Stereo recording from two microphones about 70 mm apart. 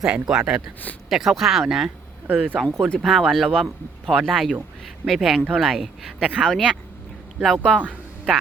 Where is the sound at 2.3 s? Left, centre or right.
Right.